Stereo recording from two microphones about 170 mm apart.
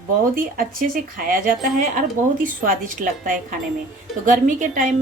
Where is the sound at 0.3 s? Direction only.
55° right (ahead or behind).